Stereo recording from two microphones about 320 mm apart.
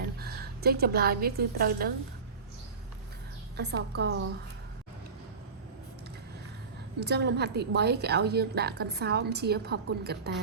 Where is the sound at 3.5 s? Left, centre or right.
Right.